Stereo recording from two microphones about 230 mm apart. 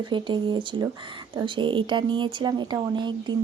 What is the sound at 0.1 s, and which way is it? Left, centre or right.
Speech, right.